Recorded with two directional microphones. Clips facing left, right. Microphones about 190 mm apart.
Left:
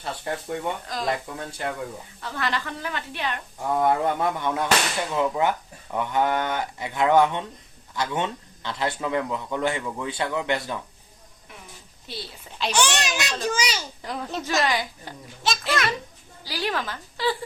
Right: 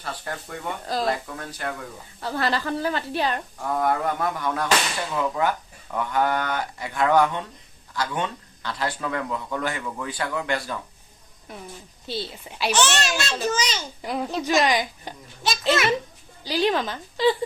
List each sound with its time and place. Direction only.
0.0 s speech: 25° left (ahead or behind)
0.9 s a woman's voice: 35° right (ahead or behind)
1.5 s speech: 25° left (ahead or behind)
2.2 s a woman's voice: 35° right (ahead or behind)
3.6 s speech: 25° left (ahead or behind)
11.5 s a woman's voice: 40° right (ahead or behind)
12.0 s a woman's voice: 25° right (ahead or behind)
12.5 s speech: 10° right (ahead or behind)
12.7 s a child's voice: 15° left (ahead or behind)
14.0 s speech: 10° right (ahead or behind)
15.4 s a child's voice: centre (ahead or behind)
16.4 s a woman's voice: 20° right (ahead or behind)